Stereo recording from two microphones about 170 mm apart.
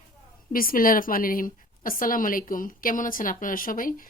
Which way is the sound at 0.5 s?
55° left (ahead or behind).